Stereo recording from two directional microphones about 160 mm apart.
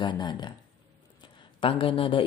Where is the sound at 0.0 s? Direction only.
30° left (ahead or behind).